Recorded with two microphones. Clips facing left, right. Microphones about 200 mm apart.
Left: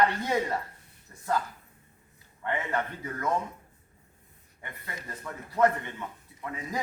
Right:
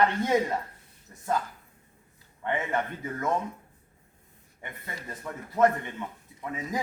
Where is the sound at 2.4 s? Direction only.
20° right (ahead or behind).